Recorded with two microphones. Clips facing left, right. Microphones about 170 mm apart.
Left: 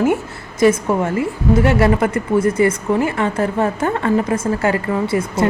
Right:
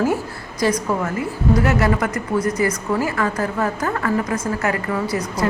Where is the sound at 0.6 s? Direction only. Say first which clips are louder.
Left 6 dB; 25° left (ahead or behind).